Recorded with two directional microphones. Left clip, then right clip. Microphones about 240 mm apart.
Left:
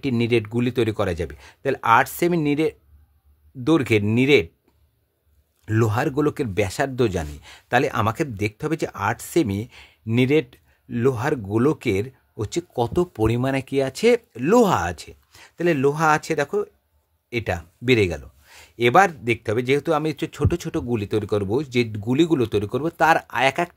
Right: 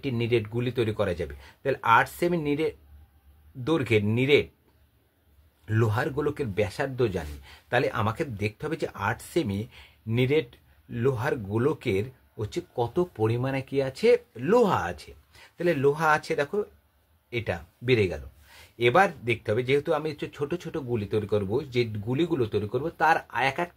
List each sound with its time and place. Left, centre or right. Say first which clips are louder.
0.0 s speech: left 5 dB; left
5.7 s speech: left 5 dB; left